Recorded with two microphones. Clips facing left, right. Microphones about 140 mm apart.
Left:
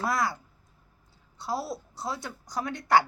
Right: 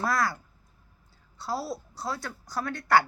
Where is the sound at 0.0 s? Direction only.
20° left (ahead or behind).